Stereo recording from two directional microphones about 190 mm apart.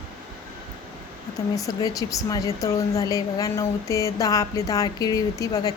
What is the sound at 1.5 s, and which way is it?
Speech, 20° left (ahead or behind).